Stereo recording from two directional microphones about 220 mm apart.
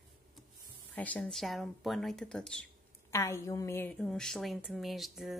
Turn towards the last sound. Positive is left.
turn(degrees=0)  # may be behind; listen again after turning